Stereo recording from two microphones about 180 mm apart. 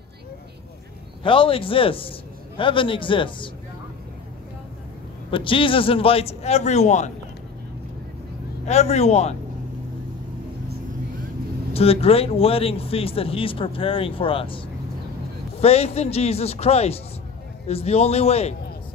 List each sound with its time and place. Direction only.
1.2 s a man's voice: 30° left (ahead or behind)
5.3 s speech: 30° left (ahead or behind)
8.6 s speech: 40° left (ahead or behind)
11.7 s speech: 35° left (ahead or behind)
15.6 s speech: 35° left (ahead or behind)